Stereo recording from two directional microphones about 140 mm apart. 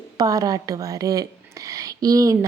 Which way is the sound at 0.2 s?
25° right (ahead or behind).